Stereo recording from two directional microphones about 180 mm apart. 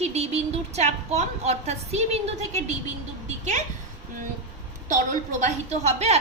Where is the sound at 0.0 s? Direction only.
35° right (ahead or behind).